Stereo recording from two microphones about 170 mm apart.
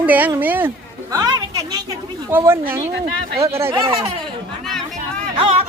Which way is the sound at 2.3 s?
15° right (ahead or behind).